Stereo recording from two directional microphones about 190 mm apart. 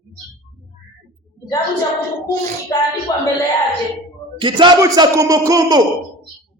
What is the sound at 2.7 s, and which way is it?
Speech, 15° left (ahead or behind).